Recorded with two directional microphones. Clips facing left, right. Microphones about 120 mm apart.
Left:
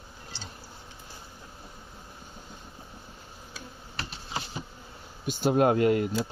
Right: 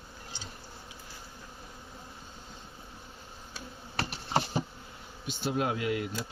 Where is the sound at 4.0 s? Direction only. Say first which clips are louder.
Right 6 dB; 65° right (ahead or behind).